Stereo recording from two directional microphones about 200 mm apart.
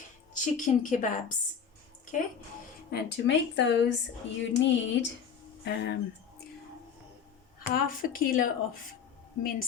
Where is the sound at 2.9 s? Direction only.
60° left (ahead or behind).